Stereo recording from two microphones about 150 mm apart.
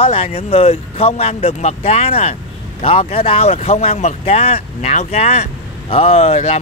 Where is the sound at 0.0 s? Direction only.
40° left (ahead or behind).